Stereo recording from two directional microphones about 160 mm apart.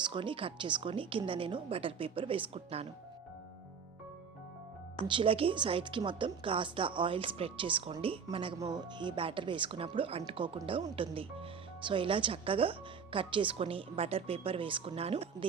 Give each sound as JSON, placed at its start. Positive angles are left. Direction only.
{"t": 0.0, "sound": "speech", "side_deg": -30}
{"t": 5.0, "sound": "speech", "side_deg": -30}